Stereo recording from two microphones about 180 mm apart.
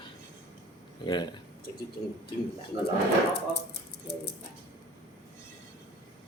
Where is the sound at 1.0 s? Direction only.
25° left (ahead or behind).